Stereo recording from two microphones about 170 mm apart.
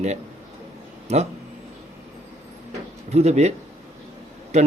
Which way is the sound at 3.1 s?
40° right (ahead or behind).